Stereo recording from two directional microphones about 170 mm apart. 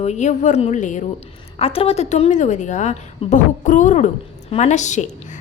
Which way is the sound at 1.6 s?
35° left (ahead or behind).